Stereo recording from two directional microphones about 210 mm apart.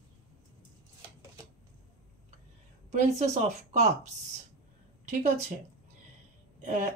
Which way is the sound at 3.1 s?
30° right (ahead or behind).